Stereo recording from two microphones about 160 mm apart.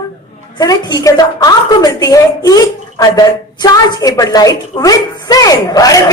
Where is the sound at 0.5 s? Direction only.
25° left (ahead or behind).